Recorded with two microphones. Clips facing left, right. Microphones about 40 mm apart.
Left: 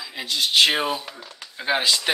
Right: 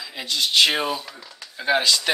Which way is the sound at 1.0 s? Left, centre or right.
Left.